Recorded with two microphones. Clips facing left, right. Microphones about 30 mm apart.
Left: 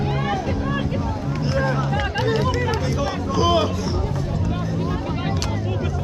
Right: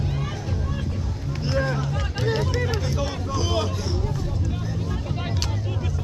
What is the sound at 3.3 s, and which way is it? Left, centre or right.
Vehicle, centre.